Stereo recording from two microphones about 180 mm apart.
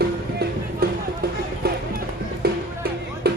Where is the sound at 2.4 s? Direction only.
60° right (ahead or behind).